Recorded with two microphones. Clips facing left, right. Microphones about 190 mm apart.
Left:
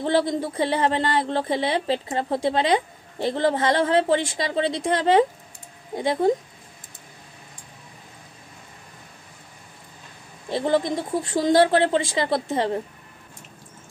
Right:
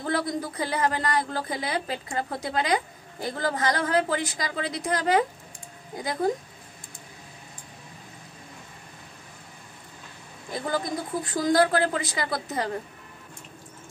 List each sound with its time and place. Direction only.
0.0 s a woman's voice: 25° left (ahead or behind)
10.5 s a woman's voice: 25° left (ahead or behind)